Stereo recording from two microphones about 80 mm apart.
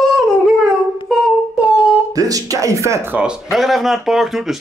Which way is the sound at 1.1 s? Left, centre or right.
Centre.